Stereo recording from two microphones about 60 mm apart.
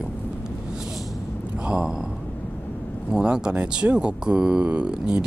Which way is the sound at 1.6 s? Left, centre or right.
Centre.